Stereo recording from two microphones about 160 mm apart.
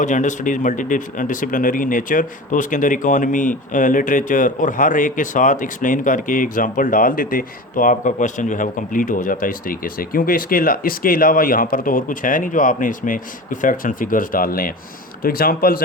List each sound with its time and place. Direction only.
0.0 s speech: 50° left (ahead or behind); by 15.8 s 65° left (ahead or behind)